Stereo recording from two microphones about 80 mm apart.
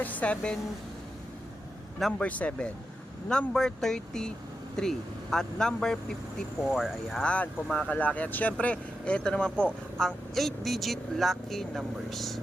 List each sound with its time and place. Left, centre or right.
0.0 s a woman's voice: centre
2.0 s speech: centre
2.2 s speech: centre
7.2 s speech: centre